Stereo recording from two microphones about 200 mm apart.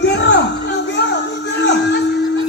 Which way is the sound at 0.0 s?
60° left (ahead or behind).